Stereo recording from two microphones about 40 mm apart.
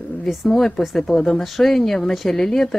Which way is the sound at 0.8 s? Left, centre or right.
Centre.